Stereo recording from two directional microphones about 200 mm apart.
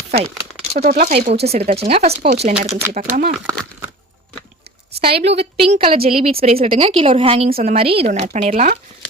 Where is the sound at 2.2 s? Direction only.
45° right (ahead or behind).